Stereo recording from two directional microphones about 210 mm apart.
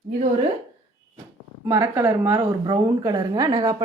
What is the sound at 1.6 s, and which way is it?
Speech, 15° right (ahead or behind).